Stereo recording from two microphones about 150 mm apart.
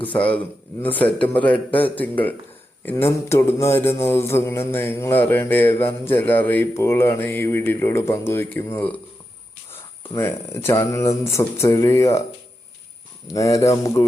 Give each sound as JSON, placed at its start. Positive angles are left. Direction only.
{"t": 0.1, "sound": "mantra", "side_deg": 10}
{"t": 10.2, "sound": "speech", "side_deg": 20}
{"t": 13.2, "sound": "speech", "side_deg": 20}